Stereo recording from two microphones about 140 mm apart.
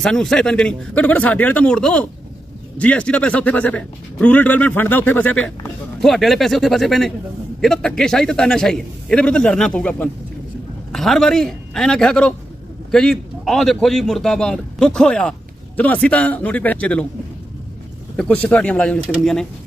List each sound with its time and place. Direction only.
0.0 s a man's voice: 5° left (ahead or behind)
18.1 s a man's voice: 10° left (ahead or behind)